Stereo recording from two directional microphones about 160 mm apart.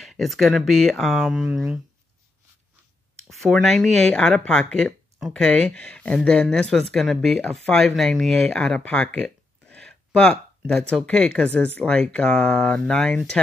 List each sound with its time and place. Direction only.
0.0 s speech: centre (ahead or behind)
3.3 s speech: centre (ahead or behind)